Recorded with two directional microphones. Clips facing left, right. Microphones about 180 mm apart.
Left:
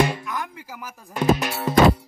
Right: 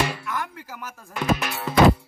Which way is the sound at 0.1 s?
15° left (ahead or behind).